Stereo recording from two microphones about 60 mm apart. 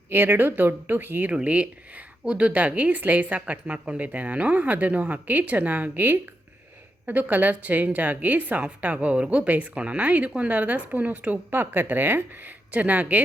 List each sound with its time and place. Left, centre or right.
0.1 s a woman's voice: right
1.3 s speech: centre
11.5 s a woman's voice: right